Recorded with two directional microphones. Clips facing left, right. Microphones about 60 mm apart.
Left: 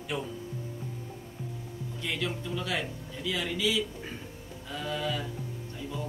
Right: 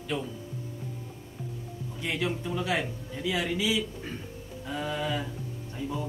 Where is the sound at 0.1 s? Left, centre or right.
Centre.